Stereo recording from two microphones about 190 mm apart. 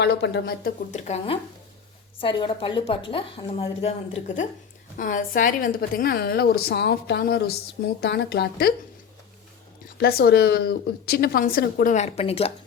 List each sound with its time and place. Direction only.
0.0 s speech: 65° left (ahead or behind)
0.9 s a woman's voice: 35° left (ahead or behind)
4.9 s a woman's voice: 45° left (ahead or behind)
10.0 s a woman's voice: 55° left (ahead or behind); by 12.5 s 30° left (ahead or behind)